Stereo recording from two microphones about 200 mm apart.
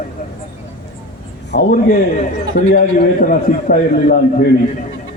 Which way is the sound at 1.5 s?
55° left (ahead or behind).